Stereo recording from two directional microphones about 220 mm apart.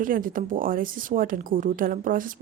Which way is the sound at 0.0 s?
40° right (ahead or behind).